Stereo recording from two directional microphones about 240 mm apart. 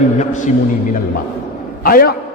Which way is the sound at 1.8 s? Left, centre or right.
Left.